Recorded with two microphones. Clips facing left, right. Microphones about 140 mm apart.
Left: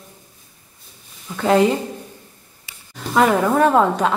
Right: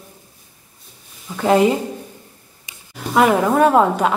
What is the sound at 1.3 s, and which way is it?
Speech, 5° right (ahead or behind).